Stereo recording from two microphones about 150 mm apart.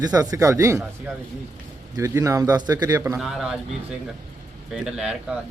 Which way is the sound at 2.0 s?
20° right (ahead or behind).